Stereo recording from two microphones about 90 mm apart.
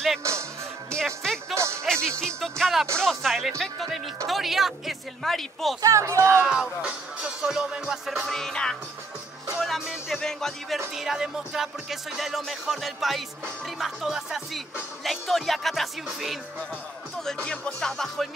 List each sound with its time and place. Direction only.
0.2 s speech: 30° right (ahead or behind)
0.9 s music: 5° left (ahead or behind)
1.5 s music: 30° right (ahead or behind)
2.0 s music: 5° left (ahead or behind)
5.8 s speech: 35° right (ahead or behind)
6.4 s speech: 10° right (ahead or behind)
7.4 s music: 10° right (ahead or behind)